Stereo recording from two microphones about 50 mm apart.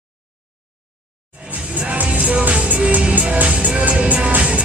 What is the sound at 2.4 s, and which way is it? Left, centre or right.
Music, right.